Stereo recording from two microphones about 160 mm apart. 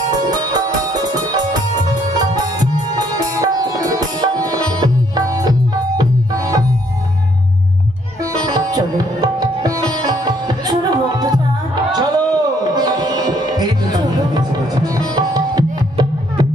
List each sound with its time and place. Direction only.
0.1 s music: 25° right (ahead or behind)
8.2 s sitar: 25° right (ahead or behind)
11.9 s music: 25° right (ahead or behind)